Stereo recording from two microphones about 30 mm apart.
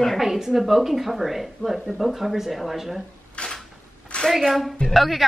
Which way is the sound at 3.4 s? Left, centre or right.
Left.